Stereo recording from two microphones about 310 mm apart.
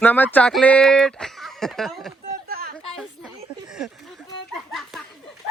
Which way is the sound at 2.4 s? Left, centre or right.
Right.